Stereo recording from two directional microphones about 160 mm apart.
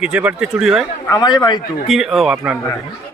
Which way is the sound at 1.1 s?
25° left (ahead or behind).